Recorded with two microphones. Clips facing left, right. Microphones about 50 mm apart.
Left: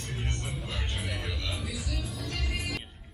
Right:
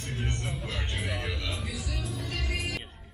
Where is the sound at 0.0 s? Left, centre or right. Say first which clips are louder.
Right 2 dB; centre.